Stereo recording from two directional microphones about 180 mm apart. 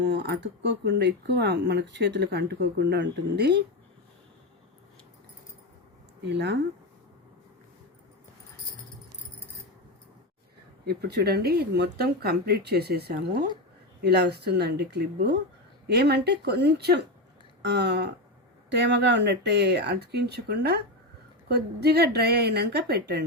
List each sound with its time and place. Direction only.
0.0 s speech: 70° right (ahead or behind)
6.2 s speech: 70° right (ahead or behind)
10.8 s speech: 65° right (ahead or behind)